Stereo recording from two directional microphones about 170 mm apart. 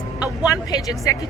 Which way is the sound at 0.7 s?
20° left (ahead or behind).